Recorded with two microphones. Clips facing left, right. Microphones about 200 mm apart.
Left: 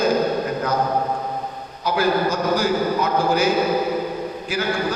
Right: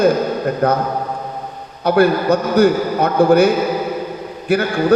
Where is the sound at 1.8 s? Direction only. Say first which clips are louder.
Right 6 dB; 60° right (ahead or behind).